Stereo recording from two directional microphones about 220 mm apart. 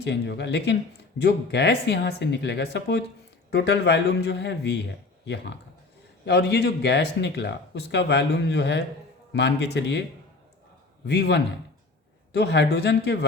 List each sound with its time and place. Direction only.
0.0 s speech: 50° left (ahead or behind)
11.0 s speech: 50° left (ahead or behind)